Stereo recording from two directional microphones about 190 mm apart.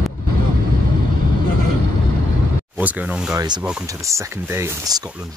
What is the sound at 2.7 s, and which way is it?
Speech, 10° right (ahead or behind).